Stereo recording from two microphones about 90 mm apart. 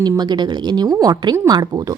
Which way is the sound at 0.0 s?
50° right (ahead or behind).